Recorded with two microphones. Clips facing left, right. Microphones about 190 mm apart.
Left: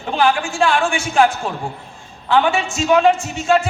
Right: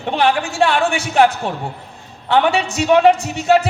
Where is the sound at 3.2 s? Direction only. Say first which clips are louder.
Right 2 dB; 70° right (ahead or behind).